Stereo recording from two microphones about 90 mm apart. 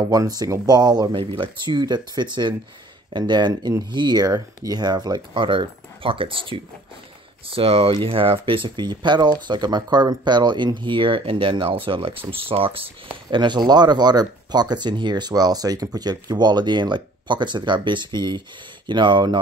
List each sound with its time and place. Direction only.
0.1 s speech: 45° right (ahead or behind)
1.1 s speech: 75° right (ahead or behind)
7.4 s speech: 90° right; by 19.4 s 60° right (ahead or behind)